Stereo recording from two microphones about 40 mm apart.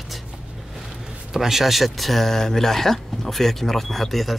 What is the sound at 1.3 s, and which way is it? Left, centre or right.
Speech, centre.